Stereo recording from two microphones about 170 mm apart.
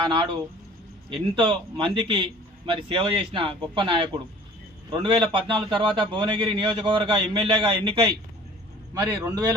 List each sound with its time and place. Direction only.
0.0 s a man's voice: 30° right (ahead or behind)
1.4 s a man's voice: 30° right (ahead or behind)